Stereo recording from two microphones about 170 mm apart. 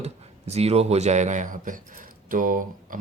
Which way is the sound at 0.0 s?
40° right (ahead or behind).